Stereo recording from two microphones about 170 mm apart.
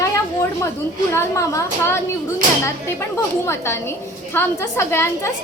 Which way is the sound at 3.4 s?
15° left (ahead or behind).